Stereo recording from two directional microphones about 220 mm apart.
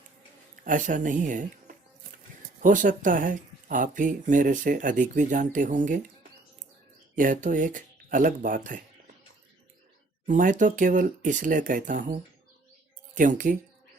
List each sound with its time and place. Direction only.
0.5 s speech: 35° right (ahead or behind)
7.2 s speech: 35° right (ahead or behind)
10.2 s speech: 35° right (ahead or behind)
13.1 s speech: 35° right (ahead or behind)